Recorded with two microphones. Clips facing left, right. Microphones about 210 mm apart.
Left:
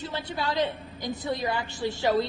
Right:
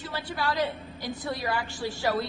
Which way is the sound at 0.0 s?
20° left (ahead or behind).